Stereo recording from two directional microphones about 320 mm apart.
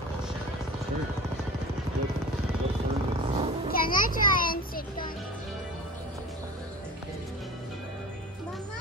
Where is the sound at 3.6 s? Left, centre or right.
Left.